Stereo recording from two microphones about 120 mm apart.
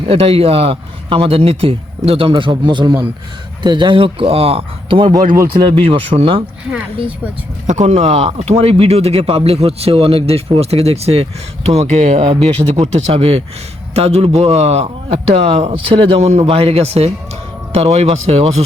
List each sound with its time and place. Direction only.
0.0 s speech: 55° right (ahead or behind)
7.7 s speech: 70° right (ahead or behind)